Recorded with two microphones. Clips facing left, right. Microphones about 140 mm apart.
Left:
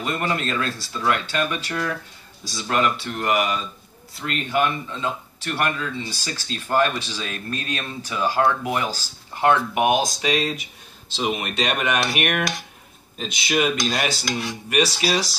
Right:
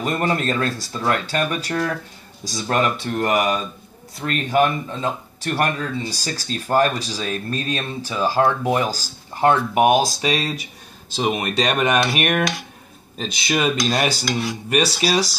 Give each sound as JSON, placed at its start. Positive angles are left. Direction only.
{"t": 0.0, "sound": "speech", "side_deg": -40}